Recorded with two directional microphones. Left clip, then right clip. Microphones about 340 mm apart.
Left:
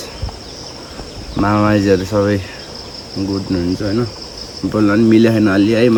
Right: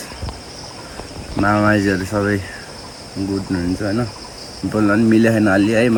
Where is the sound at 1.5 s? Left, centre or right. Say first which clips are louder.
Left 2 dB; left.